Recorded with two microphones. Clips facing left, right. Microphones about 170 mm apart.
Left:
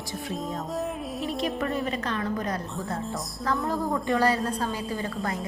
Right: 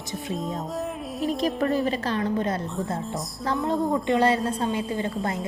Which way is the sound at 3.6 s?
20° right (ahead or behind).